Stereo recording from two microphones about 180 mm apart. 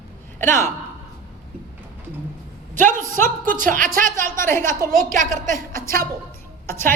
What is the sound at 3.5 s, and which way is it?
Speech, 50° right (ahead or behind).